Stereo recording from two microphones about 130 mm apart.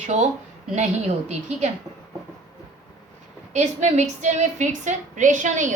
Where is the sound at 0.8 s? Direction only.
60° right (ahead or behind).